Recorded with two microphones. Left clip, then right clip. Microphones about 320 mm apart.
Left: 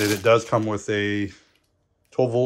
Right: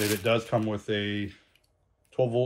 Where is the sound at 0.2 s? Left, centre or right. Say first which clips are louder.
Left 8 dB; left.